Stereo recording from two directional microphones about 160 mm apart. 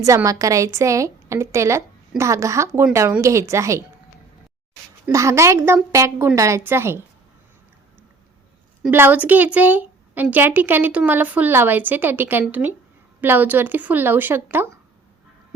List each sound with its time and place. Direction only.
0.0 s a woman's voice: 20° right (ahead or behind)
5.1 s a woman's voice: 20° right (ahead or behind)
8.9 s a woman's voice: 10° right (ahead or behind)